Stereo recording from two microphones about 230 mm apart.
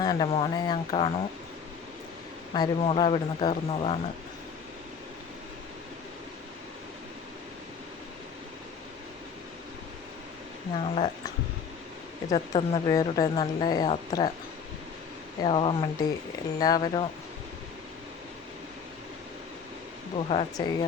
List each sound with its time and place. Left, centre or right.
0.0 s speech: centre
2.5 s speech: left
10.8 s speech: left
12.3 s speech: centre
15.4 s speech: left
20.3 s speech: centre